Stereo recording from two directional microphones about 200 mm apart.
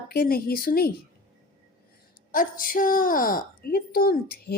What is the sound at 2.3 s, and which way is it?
A woman's voice, 45° left (ahead or behind).